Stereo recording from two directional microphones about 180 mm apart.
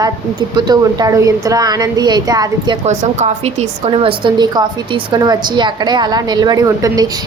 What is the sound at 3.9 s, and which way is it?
A woman's voice, 30° right (ahead or behind).